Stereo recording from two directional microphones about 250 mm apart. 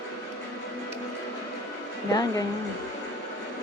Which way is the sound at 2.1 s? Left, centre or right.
Centre.